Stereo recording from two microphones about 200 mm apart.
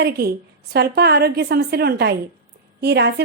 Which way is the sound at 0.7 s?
55° right (ahead or behind).